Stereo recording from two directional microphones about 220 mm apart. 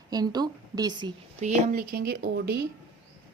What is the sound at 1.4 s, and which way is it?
Speech, 35° right (ahead or behind).